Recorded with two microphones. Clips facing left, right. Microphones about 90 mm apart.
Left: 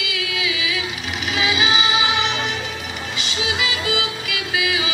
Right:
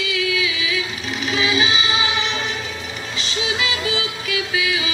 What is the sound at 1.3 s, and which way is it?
Music, 35° right (ahead or behind).